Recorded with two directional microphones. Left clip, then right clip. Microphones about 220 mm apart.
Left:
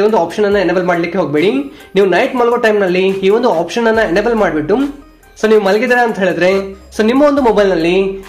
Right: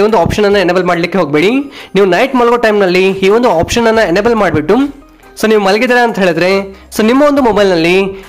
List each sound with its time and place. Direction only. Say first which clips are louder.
0.0 s speech: right 3 dB; 35° right (ahead or behind)